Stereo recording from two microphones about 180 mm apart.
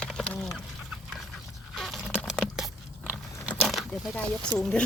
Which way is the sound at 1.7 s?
Centre (ahead or behind).